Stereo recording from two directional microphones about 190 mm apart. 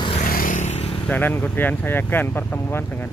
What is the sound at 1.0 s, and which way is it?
Speech, 10° left (ahead or behind).